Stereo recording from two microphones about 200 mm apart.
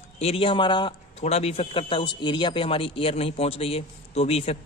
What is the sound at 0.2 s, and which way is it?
Speech, 30° left (ahead or behind).